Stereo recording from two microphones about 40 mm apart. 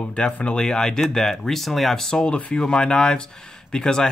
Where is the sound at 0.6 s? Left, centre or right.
Centre.